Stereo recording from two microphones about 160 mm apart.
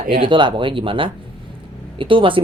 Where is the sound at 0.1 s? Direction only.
30° right (ahead or behind).